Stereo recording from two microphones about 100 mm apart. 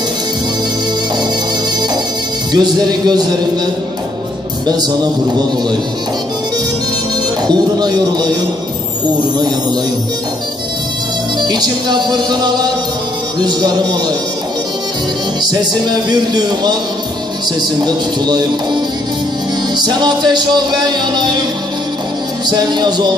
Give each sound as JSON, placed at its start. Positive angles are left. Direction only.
{"t": 2.5, "sound": "music", "side_deg": -45}
{"t": 7.4, "sound": "music", "side_deg": -45}
{"t": 11.4, "sound": "music", "side_deg": -45}
{"t": 15.4, "sound": "music", "side_deg": -45}
{"t": 19.8, "sound": "music", "side_deg": -45}
{"t": 22.5, "sound": "music", "side_deg": -45}